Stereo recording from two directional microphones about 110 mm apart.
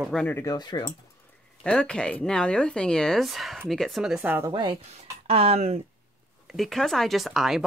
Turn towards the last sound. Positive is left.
turn(degrees=0)  # may be behind; listen again after turning